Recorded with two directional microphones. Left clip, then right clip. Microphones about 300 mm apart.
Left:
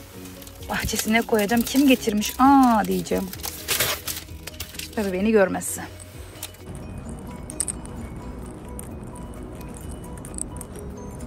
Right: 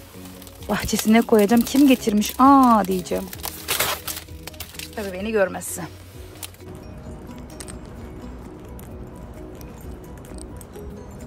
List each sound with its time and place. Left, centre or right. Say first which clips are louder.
0.7 s speech: right 3 dB; right
3.3 s a sound: even; right
4.9 s speech: left 3 dB; centre